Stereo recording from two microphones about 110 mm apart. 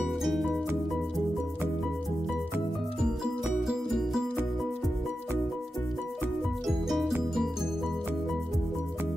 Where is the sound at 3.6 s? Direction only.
Centre (ahead or behind).